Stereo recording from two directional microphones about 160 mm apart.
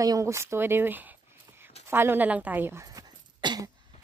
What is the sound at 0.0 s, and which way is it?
Speech, 20° right (ahead or behind).